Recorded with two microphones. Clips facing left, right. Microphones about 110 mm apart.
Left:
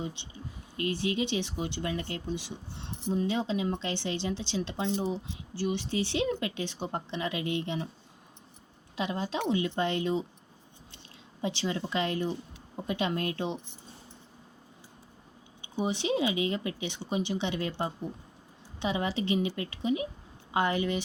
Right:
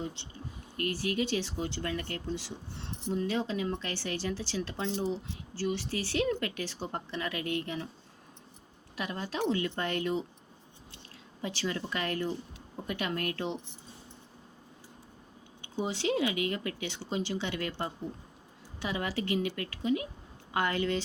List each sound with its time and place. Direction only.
0.0 s speech: 15° left (ahead or behind)
9.0 s speech: 20° left (ahead or behind)
11.4 s speech: 20° left (ahead or behind)
15.6 s speech: 20° left (ahead or behind)